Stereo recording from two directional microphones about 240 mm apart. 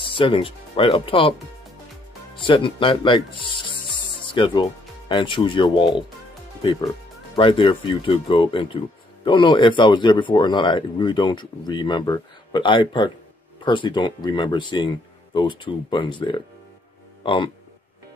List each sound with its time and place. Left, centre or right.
0.0 s speech: left
2.3 s speech: left